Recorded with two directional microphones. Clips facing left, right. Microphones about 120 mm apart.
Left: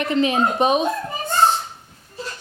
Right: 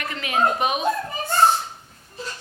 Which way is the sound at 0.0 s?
30° left (ahead or behind).